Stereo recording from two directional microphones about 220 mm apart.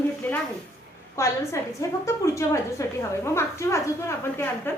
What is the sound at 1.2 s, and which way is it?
A woman's voice, 15° left (ahead or behind).